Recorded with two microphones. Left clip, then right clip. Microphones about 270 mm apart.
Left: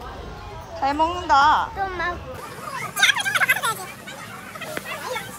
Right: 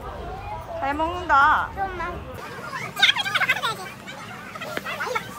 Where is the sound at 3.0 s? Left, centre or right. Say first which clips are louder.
Left 1 dB; centre.